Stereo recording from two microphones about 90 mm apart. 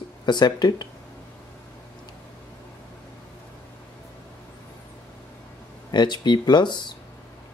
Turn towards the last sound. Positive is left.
turn(degrees=55)  # may be behind; listen again after turning